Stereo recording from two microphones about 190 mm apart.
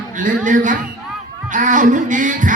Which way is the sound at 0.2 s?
45° right (ahead or behind).